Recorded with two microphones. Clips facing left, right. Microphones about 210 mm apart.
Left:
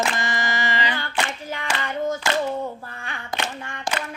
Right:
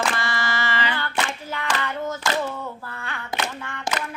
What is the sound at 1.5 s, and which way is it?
Hands, 15° left (ahead or behind).